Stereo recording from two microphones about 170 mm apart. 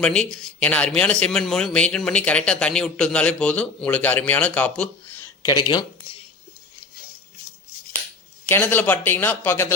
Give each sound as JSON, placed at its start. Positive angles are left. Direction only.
{"t": 0.0, "sound": "speech", "side_deg": 5}
{"t": 5.5, "sound": "speech", "side_deg": 25}
{"t": 8.4, "sound": "speech", "side_deg": 10}